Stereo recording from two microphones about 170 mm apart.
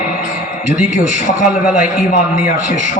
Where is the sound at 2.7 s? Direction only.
50° left (ahead or behind).